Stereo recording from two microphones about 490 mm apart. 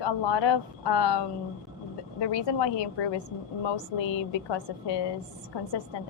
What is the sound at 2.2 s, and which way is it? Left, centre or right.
A woman's voice, left.